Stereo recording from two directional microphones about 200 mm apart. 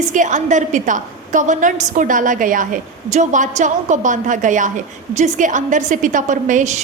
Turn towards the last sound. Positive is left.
turn(degrees=-35)  # may be behind; listen again after turning